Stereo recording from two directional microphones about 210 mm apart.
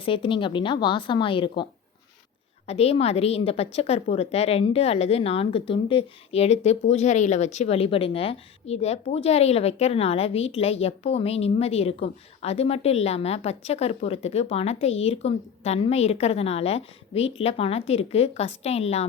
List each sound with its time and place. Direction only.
0.0 s speech: 25° left (ahead or behind)
2.6 s speech: 30° left (ahead or behind)